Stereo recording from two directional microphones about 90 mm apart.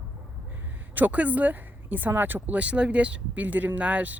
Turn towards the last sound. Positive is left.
turn(degrees=-15)  # may be behind; listen again after turning